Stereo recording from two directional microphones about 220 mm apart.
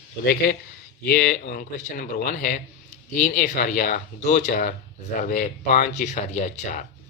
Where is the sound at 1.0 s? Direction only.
40° left (ahead or behind).